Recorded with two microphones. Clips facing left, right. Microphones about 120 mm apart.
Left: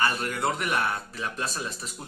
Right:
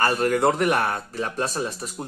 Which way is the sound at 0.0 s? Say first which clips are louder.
Right 7 dB; 45° right (ahead or behind).